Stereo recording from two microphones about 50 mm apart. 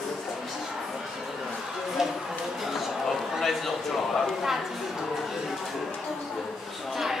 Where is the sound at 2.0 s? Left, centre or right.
Centre.